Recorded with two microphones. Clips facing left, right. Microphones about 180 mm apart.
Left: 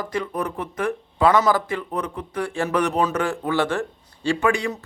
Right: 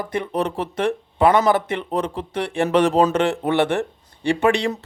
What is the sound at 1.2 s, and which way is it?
Speech, 20° right (ahead or behind).